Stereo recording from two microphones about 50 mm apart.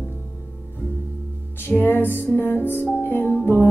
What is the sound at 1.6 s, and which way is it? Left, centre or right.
Music, left.